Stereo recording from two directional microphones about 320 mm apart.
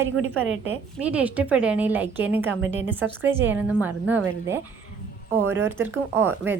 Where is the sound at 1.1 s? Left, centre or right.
Centre.